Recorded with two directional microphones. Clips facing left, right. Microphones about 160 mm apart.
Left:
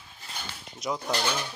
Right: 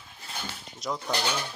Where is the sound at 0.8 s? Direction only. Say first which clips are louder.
Left 1 dB; centre (ahead or behind).